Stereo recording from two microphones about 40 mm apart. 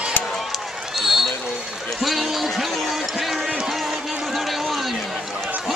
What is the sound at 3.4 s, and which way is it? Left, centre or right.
Music, centre.